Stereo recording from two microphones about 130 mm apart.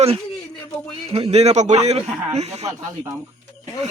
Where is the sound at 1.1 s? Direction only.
50° right (ahead or behind).